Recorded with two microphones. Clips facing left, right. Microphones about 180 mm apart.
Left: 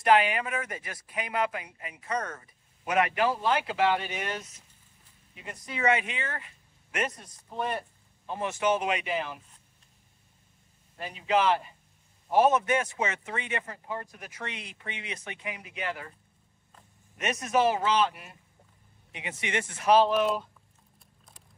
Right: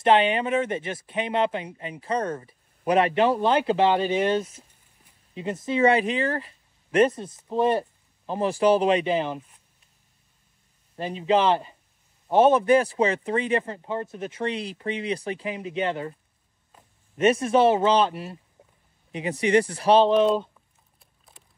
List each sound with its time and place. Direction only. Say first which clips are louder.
0.0 s speech: right 4 dB; 25° right (ahead or behind)
11.0 s speech: right 5 dB; 30° right (ahead or behind)
17.2 s speech: right 7 dB; 30° right (ahead or behind)
21.3 s a sound: right 3 dB; centre (ahead or behind)